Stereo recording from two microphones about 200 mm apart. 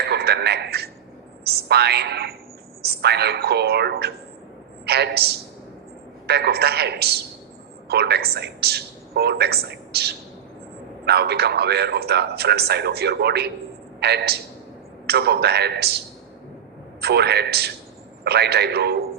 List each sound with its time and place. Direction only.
0.0 s a sound: 55° right (ahead or behind)
1.6 s a man's voice: 55° right (ahead or behind)
6.2 s a man's voice: 55° right (ahead or behind)
17.0 s a man's voice: 55° right (ahead or behind)